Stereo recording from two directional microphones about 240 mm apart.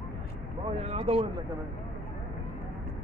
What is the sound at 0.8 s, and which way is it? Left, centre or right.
Speech, right.